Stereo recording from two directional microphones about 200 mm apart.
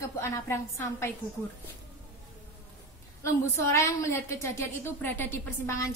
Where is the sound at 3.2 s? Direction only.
15° left (ahead or behind).